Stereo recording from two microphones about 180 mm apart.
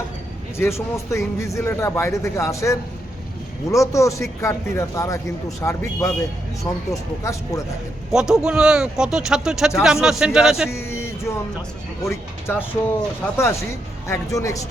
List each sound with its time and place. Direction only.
0.5 s a man's voice: 15° left (ahead or behind)
8.1 s speech: 5° right (ahead or behind)
10.7 s a sound: 15° left (ahead or behind)
12.0 s a man's voice: 15° left (ahead or behind)